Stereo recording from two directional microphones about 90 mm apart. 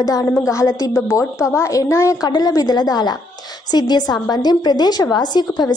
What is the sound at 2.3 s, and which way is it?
A woman's voice, 45° left (ahead or behind).